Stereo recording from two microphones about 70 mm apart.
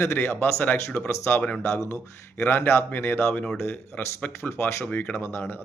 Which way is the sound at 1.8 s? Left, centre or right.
Left.